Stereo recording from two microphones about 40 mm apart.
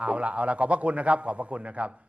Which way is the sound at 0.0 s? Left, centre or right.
Right.